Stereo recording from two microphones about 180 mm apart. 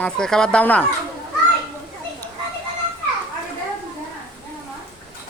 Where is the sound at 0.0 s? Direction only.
5° left (ahead or behind).